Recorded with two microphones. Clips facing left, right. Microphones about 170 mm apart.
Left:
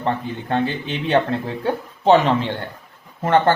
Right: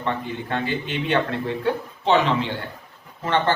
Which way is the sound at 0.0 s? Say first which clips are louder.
Left 3 dB; 40° left (ahead or behind).